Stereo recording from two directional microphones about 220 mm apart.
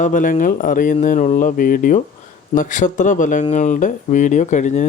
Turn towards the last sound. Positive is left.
turn(degrees=35)  # may be behind; listen again after turning